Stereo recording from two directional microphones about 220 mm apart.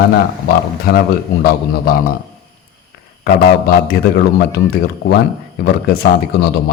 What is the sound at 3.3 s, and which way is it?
A man's voice, 45° left (ahead or behind).